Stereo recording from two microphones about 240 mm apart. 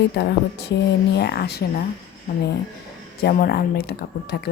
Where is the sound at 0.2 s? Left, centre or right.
Left.